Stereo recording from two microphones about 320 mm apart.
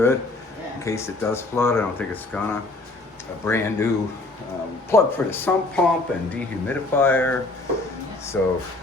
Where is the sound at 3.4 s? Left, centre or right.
Centre.